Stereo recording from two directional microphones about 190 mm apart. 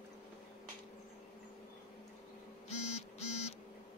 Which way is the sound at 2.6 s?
35° left (ahead or behind).